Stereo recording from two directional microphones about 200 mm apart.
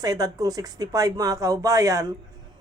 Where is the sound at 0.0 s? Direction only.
20° right (ahead or behind).